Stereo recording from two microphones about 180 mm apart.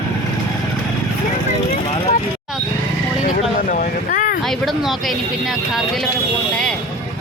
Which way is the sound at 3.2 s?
50° left (ahead or behind).